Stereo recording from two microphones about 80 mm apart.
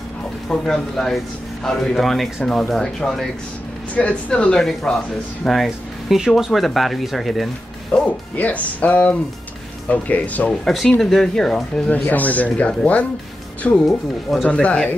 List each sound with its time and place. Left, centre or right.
0.5 s speech: centre
3.9 s speech: centre
8.4 s speech: centre
10.6 s speech: centre
11.9 s speech: left
13.8 s speech: centre
14.5 s speech: centre